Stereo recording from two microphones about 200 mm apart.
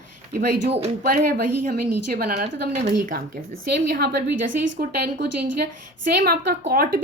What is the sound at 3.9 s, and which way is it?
A woman's voice, 50° right (ahead or behind).